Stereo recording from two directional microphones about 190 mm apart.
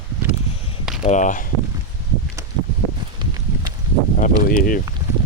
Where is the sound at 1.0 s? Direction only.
40° left (ahead or behind).